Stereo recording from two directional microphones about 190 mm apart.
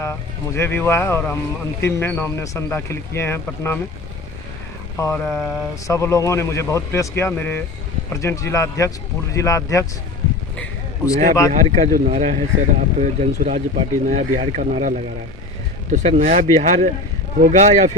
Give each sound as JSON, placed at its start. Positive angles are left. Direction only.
{"t": 0.0, "sound": "speech", "side_deg": 15}
{"t": 4.9, "sound": "speech", "side_deg": 10}
{"t": 10.6, "sound": "a sound", "side_deg": 15}
{"t": 11.3, "sound": "speech", "side_deg": 15}
{"t": 11.7, "sound": "speech", "side_deg": -35}